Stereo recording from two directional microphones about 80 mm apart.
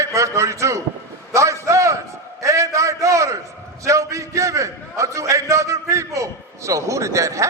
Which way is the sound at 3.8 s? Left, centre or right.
Right.